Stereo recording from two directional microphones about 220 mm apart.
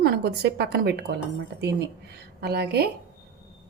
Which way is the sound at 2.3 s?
45° right (ahead or behind).